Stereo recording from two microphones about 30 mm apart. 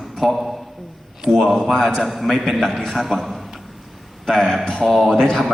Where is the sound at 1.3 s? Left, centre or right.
Left.